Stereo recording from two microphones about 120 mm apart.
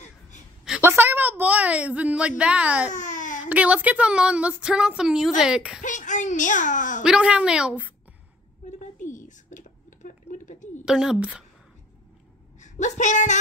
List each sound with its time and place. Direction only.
0.8 s a sound: 15° right (ahead or behind)
2.9 s baby cry: 90° left
3.4 s a woman's voice: 10° right (ahead or behind)
5.8 s a child's voice: 90° left
7.0 s a woman's voice: 10° right (ahead or behind)
9.0 s a sound: 90° left
10.9 s a woman's voice: 5° right (ahead or behind)
12.5 s speech: 85° left